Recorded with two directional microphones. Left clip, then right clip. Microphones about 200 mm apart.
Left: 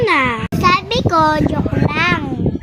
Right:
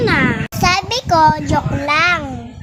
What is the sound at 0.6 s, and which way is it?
A child's voice, 15° right (ahead or behind).